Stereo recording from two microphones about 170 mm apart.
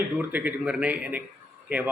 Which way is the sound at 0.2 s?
10° right (ahead or behind).